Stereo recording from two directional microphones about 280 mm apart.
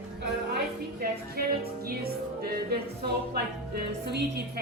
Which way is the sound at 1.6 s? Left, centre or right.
Right.